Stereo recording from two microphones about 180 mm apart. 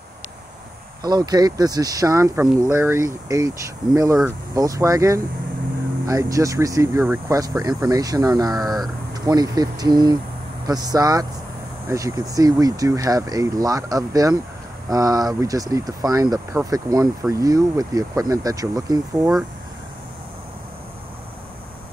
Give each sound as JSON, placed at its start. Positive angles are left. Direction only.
{"t": 1.0, "sound": "speech", "side_deg": -20}